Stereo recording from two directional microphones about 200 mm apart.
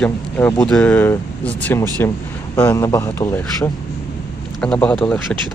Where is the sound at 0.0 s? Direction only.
10° left (ahead or behind).